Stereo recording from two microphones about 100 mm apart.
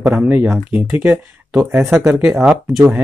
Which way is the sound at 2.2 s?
10° right (ahead or behind).